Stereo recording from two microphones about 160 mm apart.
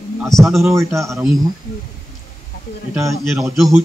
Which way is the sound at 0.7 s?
20° right (ahead or behind).